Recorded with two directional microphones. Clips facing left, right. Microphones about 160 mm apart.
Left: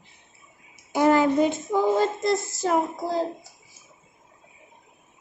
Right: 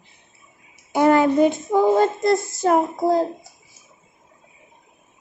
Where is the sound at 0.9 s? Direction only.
60° right (ahead or behind).